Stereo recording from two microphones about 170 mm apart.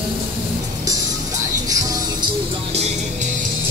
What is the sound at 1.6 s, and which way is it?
Music, 20° right (ahead or behind).